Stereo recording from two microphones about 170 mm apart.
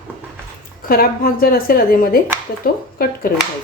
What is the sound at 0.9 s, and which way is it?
A woman's voice, 60° left (ahead or behind).